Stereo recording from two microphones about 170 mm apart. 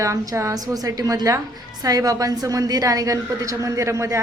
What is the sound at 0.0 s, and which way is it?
A woman's voice, 15° right (ahead or behind).